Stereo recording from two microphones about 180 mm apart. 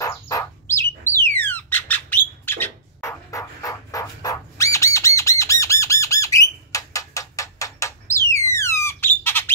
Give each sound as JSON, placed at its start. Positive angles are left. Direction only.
{"t": 0.0, "sound": "bird", "side_deg": 15}